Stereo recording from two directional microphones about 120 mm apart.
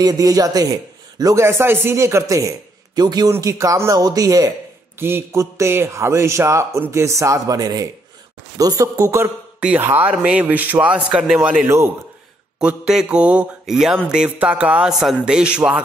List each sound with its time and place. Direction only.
0.0 s a man's voice: 30° right (ahead or behind)
4.9 s a man's voice: 20° right (ahead or behind)
9.6 s a man's voice: 15° right (ahead or behind)
12.5 s a man's voice: 5° right (ahead or behind)